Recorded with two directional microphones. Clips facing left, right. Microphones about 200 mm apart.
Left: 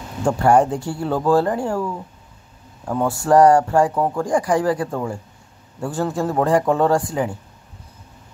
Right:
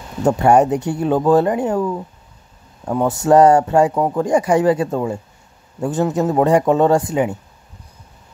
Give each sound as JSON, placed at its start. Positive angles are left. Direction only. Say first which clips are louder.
{"t": 0.2, "sound": "speech", "louder": "right 3 dB", "side_deg": -20}
{"t": 3.1, "sound": "a man's voice", "louder": "right 2 dB", "side_deg": -20}